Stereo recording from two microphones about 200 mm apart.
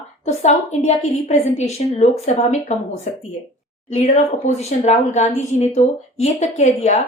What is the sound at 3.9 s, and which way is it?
A woman's voice, 35° left (ahead or behind).